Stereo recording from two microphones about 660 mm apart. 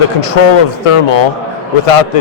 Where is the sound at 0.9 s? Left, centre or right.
Left.